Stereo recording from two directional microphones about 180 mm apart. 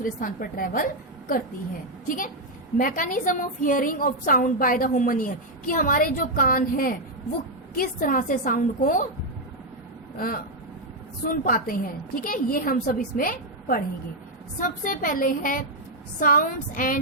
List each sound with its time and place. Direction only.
0.0 s a woman's voice: 50° left (ahead or behind)
2.0 s a woman's voice: 50° left (ahead or behind)
10.2 s a woman's voice: 50° left (ahead or behind)